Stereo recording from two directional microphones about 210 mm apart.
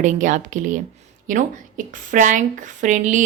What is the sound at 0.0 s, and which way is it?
A woman's voice, 35° right (ahead or behind).